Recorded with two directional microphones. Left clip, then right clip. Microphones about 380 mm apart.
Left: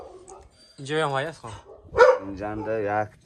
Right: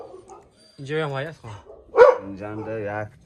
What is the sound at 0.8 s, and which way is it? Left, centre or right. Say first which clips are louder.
Speech: left 2 dB; centre.